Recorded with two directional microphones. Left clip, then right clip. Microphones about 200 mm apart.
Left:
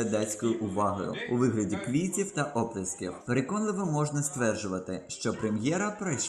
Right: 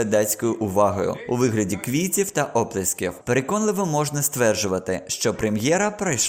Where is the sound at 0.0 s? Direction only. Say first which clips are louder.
Right 9 dB; 50° right (ahead or behind).